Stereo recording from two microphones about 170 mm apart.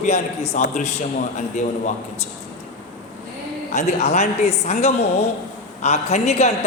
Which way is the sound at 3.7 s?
40° left (ahead or behind).